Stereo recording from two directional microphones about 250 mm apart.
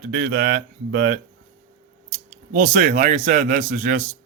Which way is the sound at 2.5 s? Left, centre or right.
Right.